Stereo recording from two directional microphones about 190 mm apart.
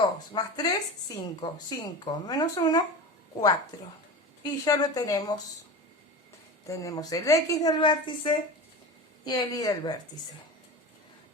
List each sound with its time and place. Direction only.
0.2 s a woman's voice: 20° left (ahead or behind)
4.4 s a woman's voice: 20° left (ahead or behind)
6.7 s a woman's voice: 20° left (ahead or behind)